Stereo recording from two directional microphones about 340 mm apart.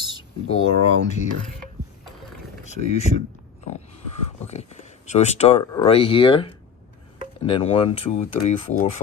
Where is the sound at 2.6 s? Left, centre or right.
Centre.